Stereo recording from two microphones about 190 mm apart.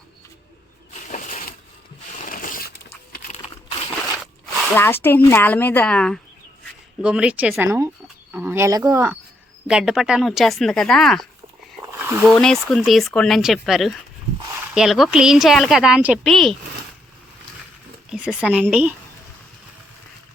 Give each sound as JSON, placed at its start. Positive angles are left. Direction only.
{"t": 1.1, "sound": "shuffling cards", "side_deg": 40}
{"t": 2.3, "sound": "a sound", "side_deg": 45}
{"t": 4.7, "sound": "speech", "side_deg": 10}
{"t": 7.0, "sound": "speech", "side_deg": -5}
{"t": 9.6, "sound": "a woman's voice", "side_deg": -5}
{"t": 18.1, "sound": "a woman's voice", "side_deg": -5}